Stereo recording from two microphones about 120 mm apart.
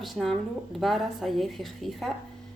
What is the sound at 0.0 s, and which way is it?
Speech, centre (ahead or behind).